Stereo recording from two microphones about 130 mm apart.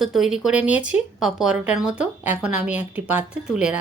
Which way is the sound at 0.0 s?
Centre (ahead or behind).